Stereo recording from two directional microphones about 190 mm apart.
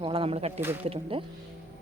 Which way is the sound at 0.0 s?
30° right (ahead or behind).